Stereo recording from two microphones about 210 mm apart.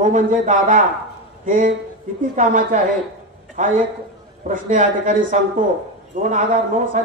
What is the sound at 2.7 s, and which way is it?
Speech, 35° right (ahead or behind).